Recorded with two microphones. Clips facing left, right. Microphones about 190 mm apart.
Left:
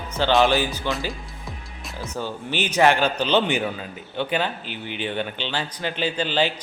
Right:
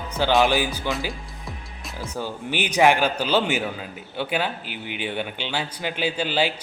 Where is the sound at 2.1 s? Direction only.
10° right (ahead or behind).